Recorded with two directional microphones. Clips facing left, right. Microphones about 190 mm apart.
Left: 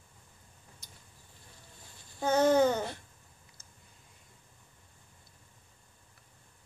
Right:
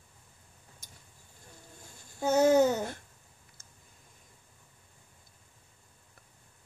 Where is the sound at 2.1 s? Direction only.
10° right (ahead or behind).